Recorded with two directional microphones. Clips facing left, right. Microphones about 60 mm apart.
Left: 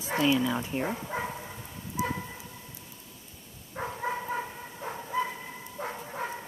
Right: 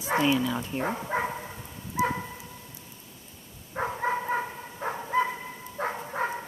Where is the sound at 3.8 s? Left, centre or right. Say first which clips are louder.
Right 4 dB; right.